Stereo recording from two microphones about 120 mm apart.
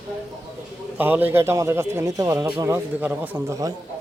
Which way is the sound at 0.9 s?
15° right (ahead or behind).